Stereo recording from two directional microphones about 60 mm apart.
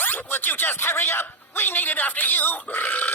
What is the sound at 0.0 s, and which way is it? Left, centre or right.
Music, left.